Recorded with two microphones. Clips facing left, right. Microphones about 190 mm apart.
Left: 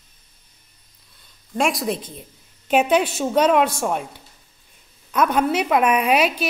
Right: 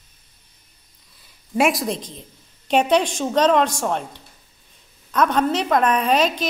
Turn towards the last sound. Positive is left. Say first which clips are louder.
# even
turn(degrees=10)  # may be behind; listen again after turning